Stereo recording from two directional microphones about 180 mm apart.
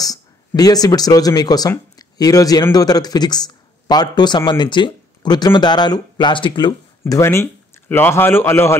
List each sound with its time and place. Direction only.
0.0 s speech: 20° left (ahead or behind)